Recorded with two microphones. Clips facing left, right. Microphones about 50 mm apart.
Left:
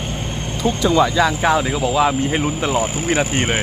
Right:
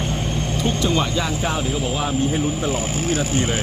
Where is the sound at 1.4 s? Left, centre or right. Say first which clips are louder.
Left 6 dB; left.